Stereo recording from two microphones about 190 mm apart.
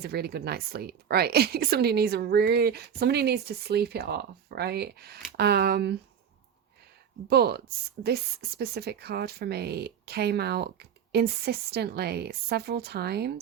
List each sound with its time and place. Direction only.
0.0 s speech: 55° right (ahead or behind)
7.3 s speech: 55° right (ahead or behind)